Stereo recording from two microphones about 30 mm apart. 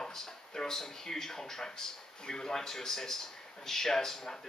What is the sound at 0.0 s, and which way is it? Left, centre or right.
A man's voice, centre.